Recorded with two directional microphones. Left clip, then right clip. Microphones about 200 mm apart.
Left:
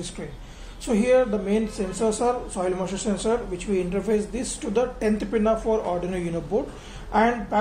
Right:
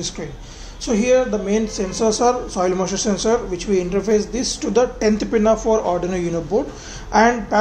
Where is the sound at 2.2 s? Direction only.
20° right (ahead or behind).